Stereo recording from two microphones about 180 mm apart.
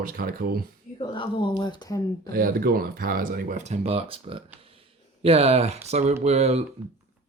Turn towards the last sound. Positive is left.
turn(degrees=-35)  # may be behind; listen again after turning